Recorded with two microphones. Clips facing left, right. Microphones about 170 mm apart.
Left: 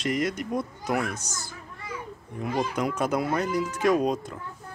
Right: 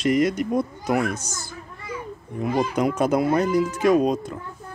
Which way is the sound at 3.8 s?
10° right (ahead or behind).